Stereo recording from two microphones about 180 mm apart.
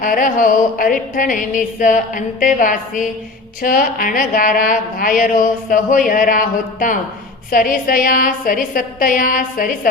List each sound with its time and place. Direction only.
0.0 s speech: 50° left (ahead or behind)